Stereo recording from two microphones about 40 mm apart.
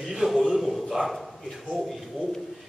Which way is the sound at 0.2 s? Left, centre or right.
Right.